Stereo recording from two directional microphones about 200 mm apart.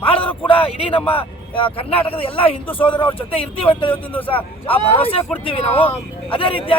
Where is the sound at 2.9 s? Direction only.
10° left (ahead or behind).